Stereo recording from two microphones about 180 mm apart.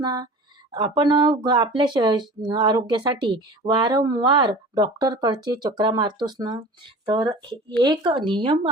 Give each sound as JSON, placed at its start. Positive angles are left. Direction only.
{"t": 0.0, "sound": "speech", "side_deg": -20}